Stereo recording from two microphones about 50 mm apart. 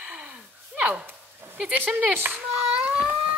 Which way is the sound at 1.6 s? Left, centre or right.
Centre.